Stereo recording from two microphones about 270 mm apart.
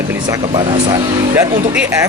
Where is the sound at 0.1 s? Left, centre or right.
Centre.